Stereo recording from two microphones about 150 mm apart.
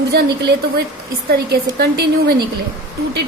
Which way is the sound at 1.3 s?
90° right.